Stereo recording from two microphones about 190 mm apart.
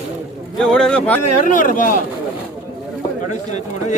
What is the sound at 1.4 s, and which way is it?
Speech, 45° left (ahead or behind).